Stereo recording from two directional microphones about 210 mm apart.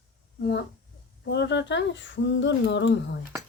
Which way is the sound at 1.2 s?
55° left (ahead or behind).